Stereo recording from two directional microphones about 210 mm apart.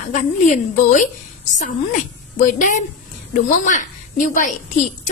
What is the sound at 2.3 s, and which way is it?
A woman's voice, 40° left (ahead or behind).